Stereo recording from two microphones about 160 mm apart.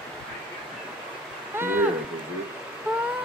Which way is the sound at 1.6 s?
15° right (ahead or behind).